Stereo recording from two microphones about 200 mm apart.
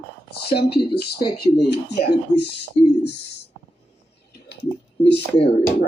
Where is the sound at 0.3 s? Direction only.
55° left (ahead or behind).